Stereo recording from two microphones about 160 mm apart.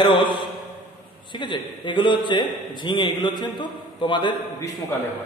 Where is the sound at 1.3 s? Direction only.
30° left (ahead or behind).